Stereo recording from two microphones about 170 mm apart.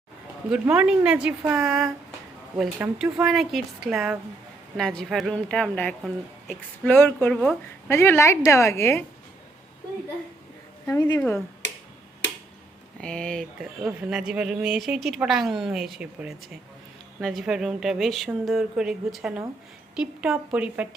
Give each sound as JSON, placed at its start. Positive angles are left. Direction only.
{"t": 0.5, "sound": "a woman's voice", "side_deg": -5}
{"t": 7.9, "sound": "a woman's voice", "side_deg": 15}
{"t": 10.8, "sound": "a woman's voice", "side_deg": 20}
{"t": 11.2, "sound": "a woman's voice", "side_deg": 5}
{"t": 12.2, "sound": "tick-tock", "side_deg": 90}
{"t": 13.0, "sound": "speech", "side_deg": 5}